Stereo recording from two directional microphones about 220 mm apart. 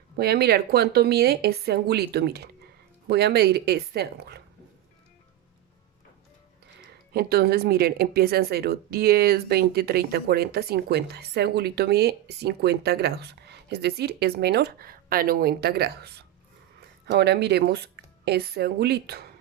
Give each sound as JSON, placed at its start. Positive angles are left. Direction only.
{"t": 0.2, "sound": "speech", "side_deg": -45}
{"t": 7.1, "sound": "speech", "side_deg": -45}